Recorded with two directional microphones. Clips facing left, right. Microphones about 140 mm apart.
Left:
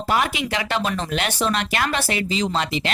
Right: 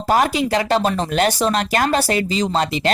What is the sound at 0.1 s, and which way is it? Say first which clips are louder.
Speech: right 6 dB; 40° right (ahead or behind).